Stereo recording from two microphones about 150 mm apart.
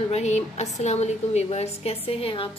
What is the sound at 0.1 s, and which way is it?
A woman's voice, 50° left (ahead or behind).